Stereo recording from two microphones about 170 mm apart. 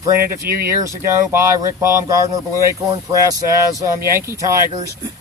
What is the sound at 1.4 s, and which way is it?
Speech, 15° right (ahead or behind).